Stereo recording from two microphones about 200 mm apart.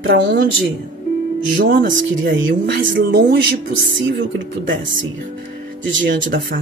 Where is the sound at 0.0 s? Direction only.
60° right (ahead or behind).